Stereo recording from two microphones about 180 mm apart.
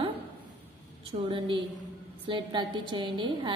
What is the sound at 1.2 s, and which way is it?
A woman's voice, 30° right (ahead or behind).